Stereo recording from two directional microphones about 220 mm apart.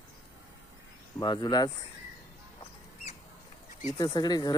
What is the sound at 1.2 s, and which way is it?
Speech, 20° left (ahead or behind).